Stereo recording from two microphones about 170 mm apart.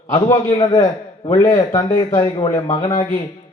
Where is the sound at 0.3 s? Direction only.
20° left (ahead or behind).